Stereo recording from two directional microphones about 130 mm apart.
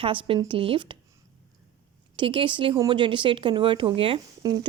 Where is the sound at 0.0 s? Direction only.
40° right (ahead or behind).